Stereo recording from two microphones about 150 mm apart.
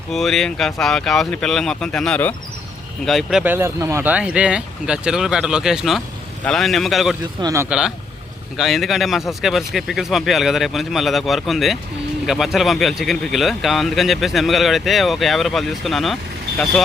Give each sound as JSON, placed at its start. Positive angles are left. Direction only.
{"t": 0.1, "sound": "speech", "side_deg": 0}
{"t": 3.4, "sound": "speech", "side_deg": -15}
{"t": 7.4, "sound": "speech", "side_deg": -20}
{"t": 7.7, "sound": "speech", "side_deg": -5}